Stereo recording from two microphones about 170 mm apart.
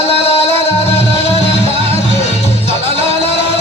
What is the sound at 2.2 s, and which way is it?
Music, 40° left (ahead or behind).